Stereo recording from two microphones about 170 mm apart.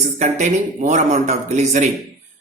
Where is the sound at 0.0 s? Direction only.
45° right (ahead or behind).